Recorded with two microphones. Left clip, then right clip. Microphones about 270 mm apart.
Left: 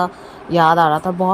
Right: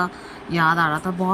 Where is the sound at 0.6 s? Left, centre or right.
Centre.